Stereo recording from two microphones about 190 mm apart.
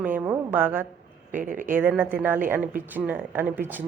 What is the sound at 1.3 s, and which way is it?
Speech, 45° right (ahead or behind).